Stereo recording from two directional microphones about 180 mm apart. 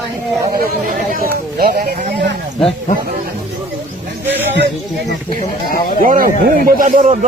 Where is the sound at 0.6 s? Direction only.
50° right (ahead or behind).